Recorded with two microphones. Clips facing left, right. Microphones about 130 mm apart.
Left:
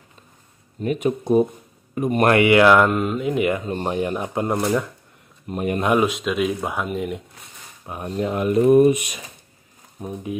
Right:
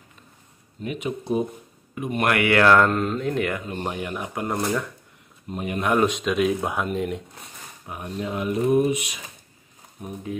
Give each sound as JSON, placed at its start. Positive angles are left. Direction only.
{"t": 0.8, "sound": "speech", "side_deg": 45}
{"t": 2.3, "sound": "speech", "side_deg": 20}
{"t": 3.6, "sound": "speech", "side_deg": 35}
{"t": 5.5, "sound": "speech", "side_deg": 50}
{"t": 5.9, "sound": "speech", "side_deg": 5}
{"t": 7.8, "sound": "speech", "side_deg": 40}
{"t": 10.0, "sound": "speech", "side_deg": 30}